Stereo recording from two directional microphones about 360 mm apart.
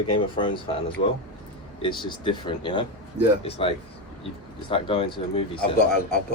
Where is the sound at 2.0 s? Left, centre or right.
Centre.